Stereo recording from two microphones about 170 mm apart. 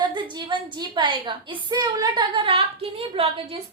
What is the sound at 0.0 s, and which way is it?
A woman's voice, 25° right (ahead or behind).